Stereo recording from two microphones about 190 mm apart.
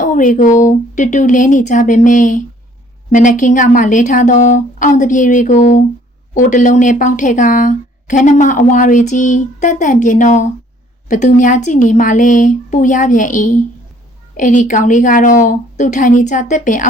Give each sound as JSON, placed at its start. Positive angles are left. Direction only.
{"t": 0.0, "sound": "a woman's voice", "side_deg": 45}